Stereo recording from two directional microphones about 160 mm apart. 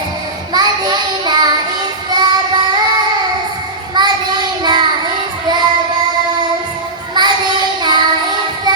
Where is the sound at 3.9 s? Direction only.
25° right (ahead or behind).